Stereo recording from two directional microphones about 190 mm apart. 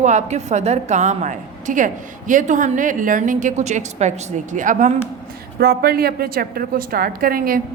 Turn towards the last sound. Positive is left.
turn(degrees=-50)  # may be behind; listen again after turning